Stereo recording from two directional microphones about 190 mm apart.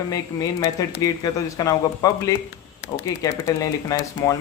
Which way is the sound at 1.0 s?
20° left (ahead or behind).